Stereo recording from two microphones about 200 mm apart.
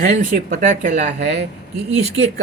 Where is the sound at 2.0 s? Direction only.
30° right (ahead or behind).